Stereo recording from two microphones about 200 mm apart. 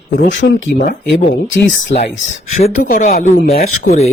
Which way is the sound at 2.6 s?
35° left (ahead or behind).